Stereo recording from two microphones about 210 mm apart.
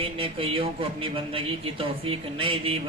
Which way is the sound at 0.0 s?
25° right (ahead or behind).